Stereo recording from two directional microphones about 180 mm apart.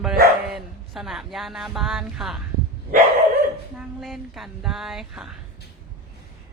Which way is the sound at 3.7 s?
Centre (ahead or behind).